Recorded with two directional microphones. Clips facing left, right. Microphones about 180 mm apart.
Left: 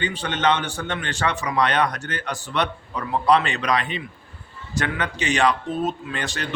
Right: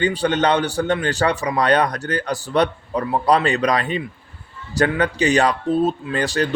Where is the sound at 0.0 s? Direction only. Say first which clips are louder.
Right 5 dB; 40° right (ahead or behind).